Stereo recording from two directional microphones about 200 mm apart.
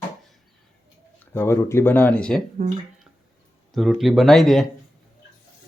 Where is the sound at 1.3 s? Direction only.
15° left (ahead or behind).